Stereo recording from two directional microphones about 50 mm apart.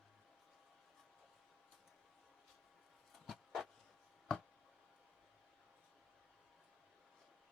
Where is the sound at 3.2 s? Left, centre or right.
Centre.